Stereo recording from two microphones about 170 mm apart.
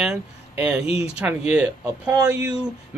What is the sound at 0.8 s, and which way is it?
Speech, 35° left (ahead or behind).